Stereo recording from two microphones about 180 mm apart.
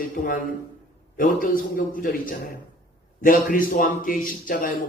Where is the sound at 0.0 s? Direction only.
50° left (ahead or behind).